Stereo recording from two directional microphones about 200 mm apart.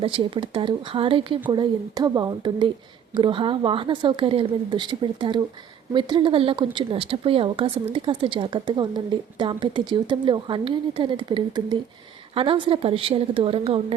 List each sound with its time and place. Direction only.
0.0 s speech: 25° right (ahead or behind)